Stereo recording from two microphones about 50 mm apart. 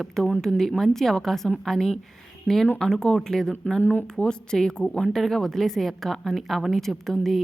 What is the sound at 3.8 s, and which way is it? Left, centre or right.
Speech, left.